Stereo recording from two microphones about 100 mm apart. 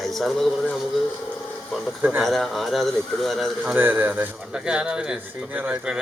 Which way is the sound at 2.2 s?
Centre (ahead or behind).